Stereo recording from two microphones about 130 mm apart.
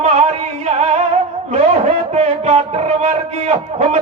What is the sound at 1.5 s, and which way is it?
A man's voice, 55° right (ahead or behind).